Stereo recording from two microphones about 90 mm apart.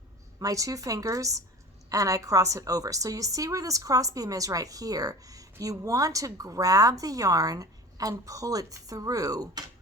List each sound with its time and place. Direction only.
0.3 s a woman's voice: 40° right (ahead or behind)